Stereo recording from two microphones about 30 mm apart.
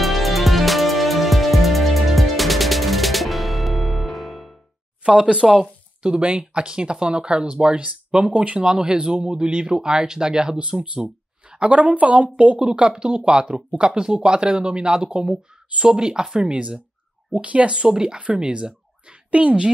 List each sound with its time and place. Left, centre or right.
0.0 s music: centre
5.4 s speech: centre
6.0 s speech: right
8.5 s speech: right
17.3 s speech: right
17.6 s speech: right
18.2 s speech: right